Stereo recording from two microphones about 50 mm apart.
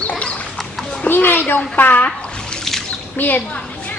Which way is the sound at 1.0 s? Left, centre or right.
Left.